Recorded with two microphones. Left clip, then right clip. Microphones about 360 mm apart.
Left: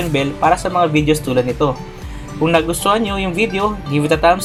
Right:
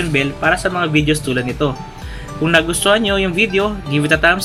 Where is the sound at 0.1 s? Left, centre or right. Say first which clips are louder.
Left 2 dB; centre.